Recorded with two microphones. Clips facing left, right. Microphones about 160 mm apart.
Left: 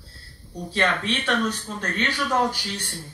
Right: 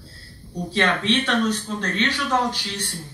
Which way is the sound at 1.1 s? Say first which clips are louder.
Right 4 dB; 10° left (ahead or behind).